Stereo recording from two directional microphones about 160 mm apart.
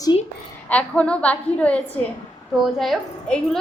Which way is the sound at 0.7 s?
10° left (ahead or behind).